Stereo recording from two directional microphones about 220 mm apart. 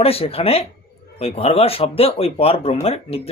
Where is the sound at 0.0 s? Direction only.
25° left (ahead or behind).